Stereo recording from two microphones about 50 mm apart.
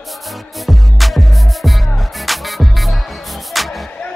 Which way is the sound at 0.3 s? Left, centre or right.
Centre.